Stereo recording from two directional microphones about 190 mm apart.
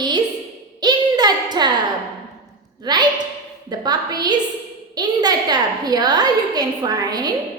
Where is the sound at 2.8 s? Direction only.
20° right (ahead or behind).